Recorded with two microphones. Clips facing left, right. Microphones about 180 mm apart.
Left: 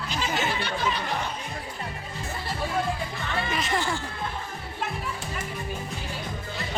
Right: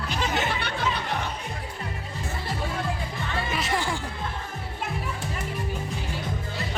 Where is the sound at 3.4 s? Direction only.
5° right (ahead or behind).